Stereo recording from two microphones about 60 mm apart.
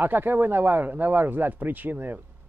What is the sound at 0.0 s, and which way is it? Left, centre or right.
A man's voice, right.